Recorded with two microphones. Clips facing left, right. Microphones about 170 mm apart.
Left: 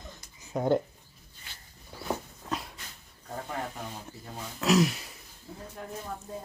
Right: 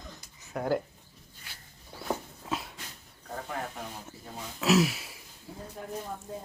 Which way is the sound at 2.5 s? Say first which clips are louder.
Even; centre (ahead or behind).